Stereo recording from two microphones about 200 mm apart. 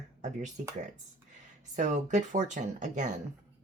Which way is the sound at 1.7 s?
35° right (ahead or behind).